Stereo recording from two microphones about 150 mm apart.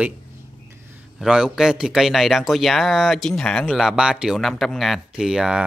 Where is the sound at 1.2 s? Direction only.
5° right (ahead or behind).